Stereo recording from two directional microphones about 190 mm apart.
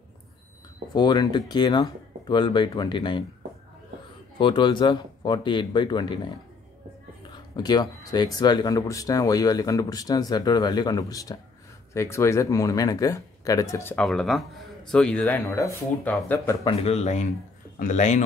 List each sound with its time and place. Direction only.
0.9 s speech: 20° left (ahead or behind)
4.4 s speech: 25° left (ahead or behind)
7.5 s speech: 20° left (ahead or behind)
16.6 s speech: 35° left (ahead or behind)